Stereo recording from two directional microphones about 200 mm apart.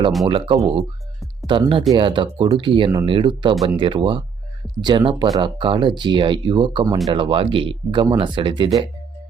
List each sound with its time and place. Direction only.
0.3 s speech: 25° right (ahead or behind)
3.5 s speech: centre (ahead or behind)
3.8 s speech: 25° right (ahead or behind)